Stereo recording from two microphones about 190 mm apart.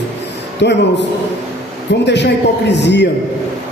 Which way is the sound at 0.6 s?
65° left (ahead or behind).